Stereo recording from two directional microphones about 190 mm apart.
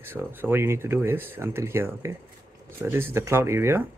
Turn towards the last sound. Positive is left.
turn(degrees=-15)  # may be behind; listen again after turning